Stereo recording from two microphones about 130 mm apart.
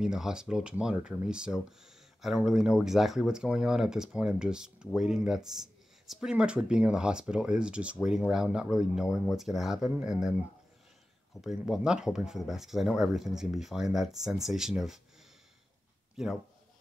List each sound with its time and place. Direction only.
0.0 s speech: 5° right (ahead or behind)
11.4 s speech: 5° right (ahead or behind)
16.2 s speech: 5° right (ahead or behind)